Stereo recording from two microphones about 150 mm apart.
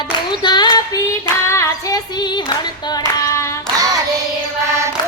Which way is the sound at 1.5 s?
20° left (ahead or behind).